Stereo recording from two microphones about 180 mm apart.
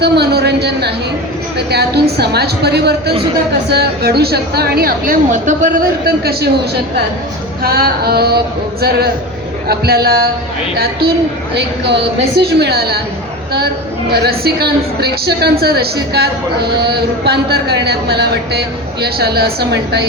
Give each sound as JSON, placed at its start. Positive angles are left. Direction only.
{"t": 0.0, "sound": "a sound", "side_deg": -65}
{"t": 1.5, "sound": "a woman's voice", "side_deg": -65}
{"t": 7.6, "sound": "a woman's voice", "side_deg": -60}
{"t": 11.5, "sound": "a woman's voice", "side_deg": -70}
{"t": 14.1, "sound": "a woman's voice", "side_deg": -60}